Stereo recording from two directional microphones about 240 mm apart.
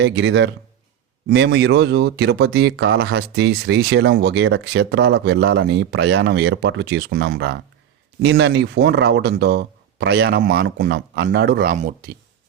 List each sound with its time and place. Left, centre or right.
0.0 s speech: right